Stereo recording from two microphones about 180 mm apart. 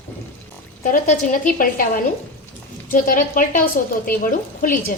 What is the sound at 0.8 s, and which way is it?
A woman's voice, 45° left (ahead or behind).